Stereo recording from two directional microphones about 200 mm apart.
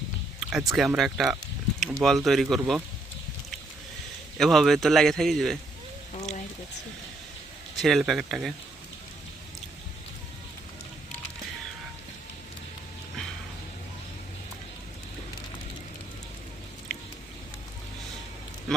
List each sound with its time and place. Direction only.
0.5 s a man's voice: centre (ahead or behind)
4.4 s a man's voice: centre (ahead or behind)
6.1 s speech: 35° left (ahead or behind)
7.8 s a man's voice: centre (ahead or behind)